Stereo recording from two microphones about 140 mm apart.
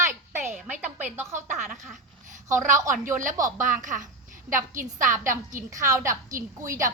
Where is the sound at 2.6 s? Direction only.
65° right (ahead or behind).